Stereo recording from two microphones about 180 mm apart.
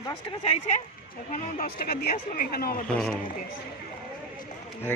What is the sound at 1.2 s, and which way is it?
Speech, 45° left (ahead or behind).